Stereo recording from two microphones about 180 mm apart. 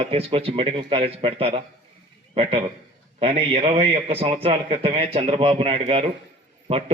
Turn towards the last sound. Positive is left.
turn(degrees=-30)  # may be behind; listen again after turning